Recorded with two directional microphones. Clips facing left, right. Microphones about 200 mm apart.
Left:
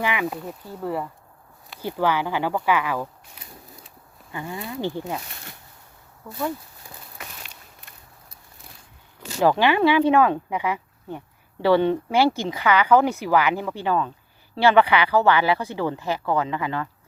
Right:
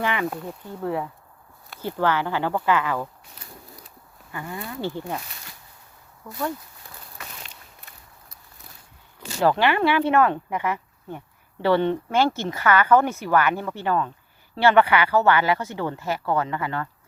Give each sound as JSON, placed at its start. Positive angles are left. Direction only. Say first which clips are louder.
{"t": 0.0, "sound": "speech", "louder": "even", "side_deg": 10}
{"t": 1.8, "sound": "speech", "louder": "even", "side_deg": 15}
{"t": 4.3, "sound": "speech", "louder": "left 2 dB", "side_deg": 20}
{"t": 9.4, "sound": "speech", "louder": "left 2 dB", "side_deg": 15}